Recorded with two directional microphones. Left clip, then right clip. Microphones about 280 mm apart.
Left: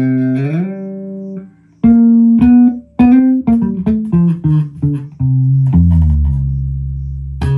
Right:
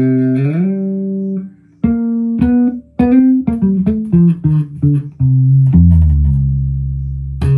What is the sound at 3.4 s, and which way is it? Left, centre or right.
Music, centre.